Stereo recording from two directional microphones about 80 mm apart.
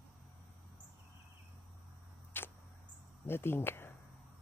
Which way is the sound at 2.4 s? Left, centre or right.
Left.